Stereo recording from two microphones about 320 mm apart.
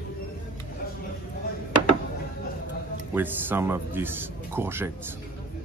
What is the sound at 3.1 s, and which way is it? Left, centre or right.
Speech, centre.